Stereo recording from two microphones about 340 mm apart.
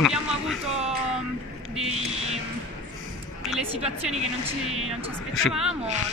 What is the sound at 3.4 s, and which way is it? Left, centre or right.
Music, centre.